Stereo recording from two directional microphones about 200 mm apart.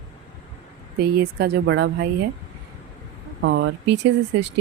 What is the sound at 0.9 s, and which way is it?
Speech, 50° right (ahead or behind).